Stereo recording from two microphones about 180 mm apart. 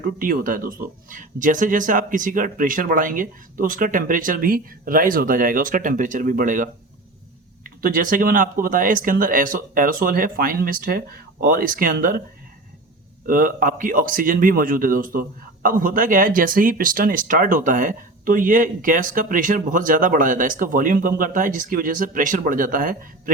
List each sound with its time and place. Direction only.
0.2 s speech: 50° right (ahead or behind)
13.2 s speech: 50° right (ahead or behind)